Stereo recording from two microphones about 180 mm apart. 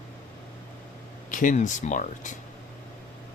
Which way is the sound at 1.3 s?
45° left (ahead or behind).